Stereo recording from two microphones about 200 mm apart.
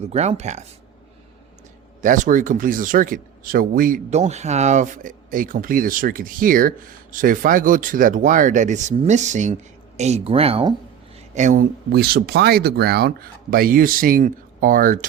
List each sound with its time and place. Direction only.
0.1 s speech: 35° right (ahead or behind)
2.0 s speech: 40° right (ahead or behind)
11.3 s speech: 40° right (ahead or behind)